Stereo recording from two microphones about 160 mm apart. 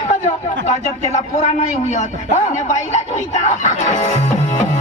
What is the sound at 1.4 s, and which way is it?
A man's voice, 45° left (ahead or behind).